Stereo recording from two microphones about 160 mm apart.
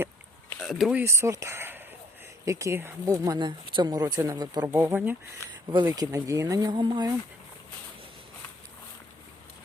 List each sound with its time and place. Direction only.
0.6 s speech: centre (ahead or behind); by 4.8 s 25° right (ahead or behind)
4.8 s speech: 10° right (ahead or behind); by 7.1 s 25° right (ahead or behind)